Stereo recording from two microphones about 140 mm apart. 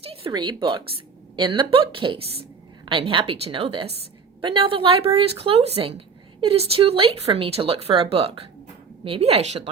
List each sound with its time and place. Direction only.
0.0 s speech: 45° right (ahead or behind)